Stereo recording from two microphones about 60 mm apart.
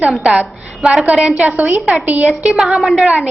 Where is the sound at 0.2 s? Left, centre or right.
Centre.